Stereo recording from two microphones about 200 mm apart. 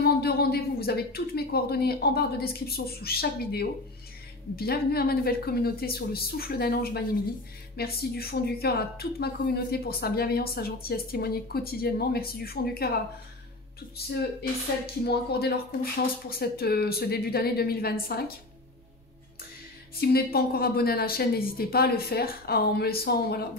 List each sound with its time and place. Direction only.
0.0 s speech: 50° left (ahead or behind)
14.0 s speech: 50° left (ahead or behind)
20.0 s speech: 50° left (ahead or behind)